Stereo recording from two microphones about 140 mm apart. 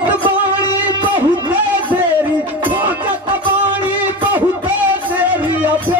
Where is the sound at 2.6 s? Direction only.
10° right (ahead or behind).